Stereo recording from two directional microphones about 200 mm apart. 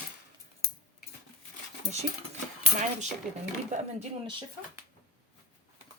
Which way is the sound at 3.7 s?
35° right (ahead or behind).